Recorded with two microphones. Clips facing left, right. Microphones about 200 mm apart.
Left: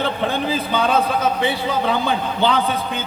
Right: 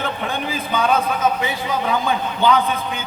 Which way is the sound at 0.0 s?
35° left (ahead or behind).